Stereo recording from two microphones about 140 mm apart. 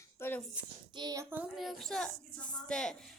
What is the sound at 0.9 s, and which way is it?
Speech, 25° right (ahead or behind).